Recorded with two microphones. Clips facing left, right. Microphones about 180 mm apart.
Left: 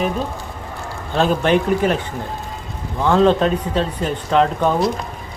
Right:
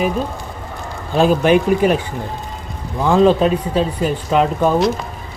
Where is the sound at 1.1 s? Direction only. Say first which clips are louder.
Right 3 dB; 10° right (ahead or behind).